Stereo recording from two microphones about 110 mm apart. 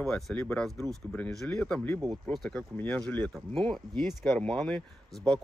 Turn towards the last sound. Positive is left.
turn(degrees=5)  # may be behind; listen again after turning